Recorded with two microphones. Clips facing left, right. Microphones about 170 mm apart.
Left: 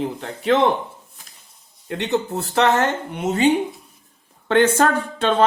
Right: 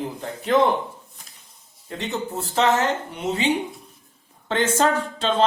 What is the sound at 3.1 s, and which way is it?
Speech, 50° left (ahead or behind).